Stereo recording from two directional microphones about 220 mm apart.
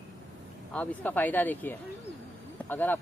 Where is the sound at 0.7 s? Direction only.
5° left (ahead or behind).